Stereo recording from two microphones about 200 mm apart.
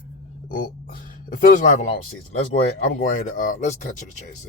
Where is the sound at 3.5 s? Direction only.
35° left (ahead or behind).